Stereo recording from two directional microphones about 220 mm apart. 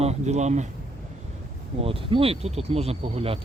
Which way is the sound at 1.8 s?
25° right (ahead or behind).